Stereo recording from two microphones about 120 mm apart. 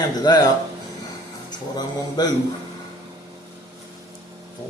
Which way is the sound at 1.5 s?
35° left (ahead or behind).